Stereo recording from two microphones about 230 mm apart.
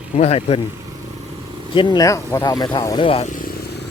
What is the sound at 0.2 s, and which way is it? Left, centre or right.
Speech, left.